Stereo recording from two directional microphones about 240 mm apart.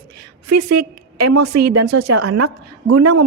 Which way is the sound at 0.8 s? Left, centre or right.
Right.